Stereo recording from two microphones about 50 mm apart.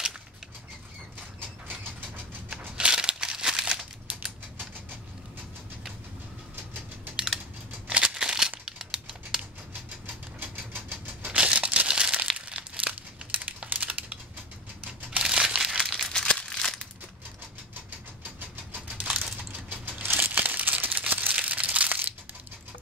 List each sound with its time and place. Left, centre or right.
1.7 s ratchet: right
2.5 s crumpling: centre
7.9 s crumpling: centre
10.4 s a sound: right
11.2 s crumpling: right
15.0 s crumpling: centre
15.8 s crumpling: centre
16.1 s crumpling: centre
19.0 s typing: centre
19.8 s crumpling: right